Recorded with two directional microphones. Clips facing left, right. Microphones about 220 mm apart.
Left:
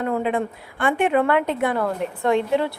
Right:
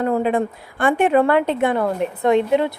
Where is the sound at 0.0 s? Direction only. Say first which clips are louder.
Right 4 dB; 40° right (ahead or behind).